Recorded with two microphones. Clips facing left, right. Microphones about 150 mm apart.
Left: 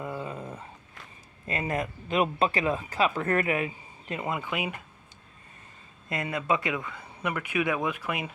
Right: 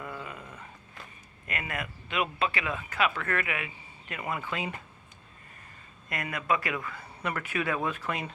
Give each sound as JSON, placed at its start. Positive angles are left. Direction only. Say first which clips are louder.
{"t": 0.0, "sound": "dog", "louder": "left 5 dB", "side_deg": 25}
{"t": 1.5, "sound": "speech", "louder": "left 6 dB", "side_deg": 30}
{"t": 4.1, "sound": "speech", "louder": "left 3 dB", "side_deg": 25}
{"t": 6.1, "sound": "speech", "louder": "left 2 dB", "side_deg": 25}